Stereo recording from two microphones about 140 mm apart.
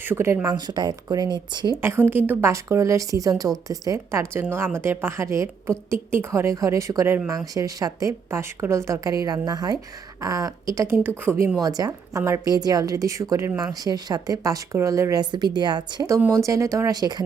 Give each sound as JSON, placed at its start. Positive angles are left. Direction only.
{"t": 0.0, "sound": "speech", "side_deg": -15}
{"t": 0.4, "sound": "speech", "side_deg": -30}
{"t": 1.7, "sound": "speech", "side_deg": -20}